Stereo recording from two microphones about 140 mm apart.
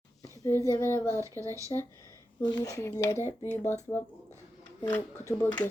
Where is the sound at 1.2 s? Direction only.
20° right (ahead or behind).